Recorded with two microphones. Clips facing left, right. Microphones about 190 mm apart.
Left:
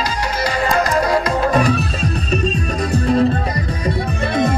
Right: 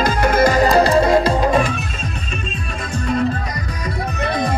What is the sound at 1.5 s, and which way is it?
Music, 40° left (ahead or behind).